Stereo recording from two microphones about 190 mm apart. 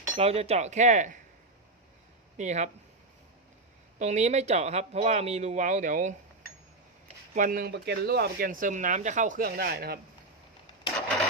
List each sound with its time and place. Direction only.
0.2 s speech: 30° right (ahead or behind)
2.4 s speech: 40° right (ahead or behind)
3.9 s speech: 40° right (ahead or behind)
7.3 s speech: 45° right (ahead or behind)
7.7 s speech: 60° right (ahead or behind)